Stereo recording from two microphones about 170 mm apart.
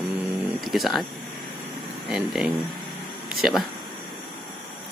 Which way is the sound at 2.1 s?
Centre (ahead or behind).